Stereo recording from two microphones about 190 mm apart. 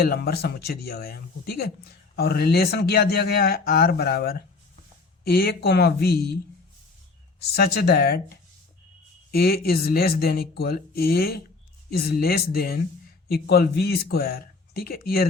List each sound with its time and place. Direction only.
0.0 s speech: 55° left (ahead or behind)
7.3 s speech: 55° left (ahead or behind)
9.3 s speech: 55° left (ahead or behind)